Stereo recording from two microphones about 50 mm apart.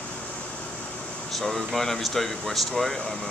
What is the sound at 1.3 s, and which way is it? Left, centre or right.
Speech, centre.